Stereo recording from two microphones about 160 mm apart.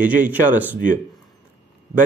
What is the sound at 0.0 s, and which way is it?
Speech, 10° right (ahead or behind).